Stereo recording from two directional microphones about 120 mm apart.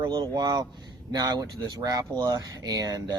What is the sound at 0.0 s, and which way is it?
Speech, 35° right (ahead or behind).